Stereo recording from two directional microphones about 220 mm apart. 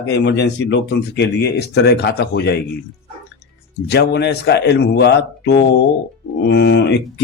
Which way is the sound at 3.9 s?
50° left (ahead or behind).